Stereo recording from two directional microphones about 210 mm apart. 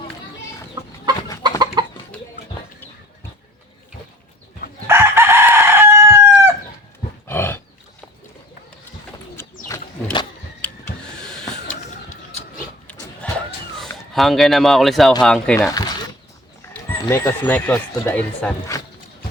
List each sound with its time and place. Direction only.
1.5 s chicken: 20° right (ahead or behind)
4.9 s chicken: 10° right (ahead or behind)
7.3 s roaring cats: 10° left (ahead or behind)
9.6 s a sound: 20° left (ahead or behind)
11.2 s a sound: 5° left (ahead or behind)
12.9 s a sound: 5° left (ahead or behind)
14.1 s speech: centre (ahead or behind)
15.7 s zipper: 20° left (ahead or behind)
17.1 s speech: 10° left (ahead or behind)